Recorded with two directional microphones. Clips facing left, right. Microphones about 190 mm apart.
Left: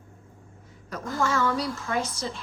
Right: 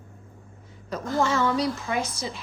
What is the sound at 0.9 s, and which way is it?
A woman's voice, 25° right (ahead or behind).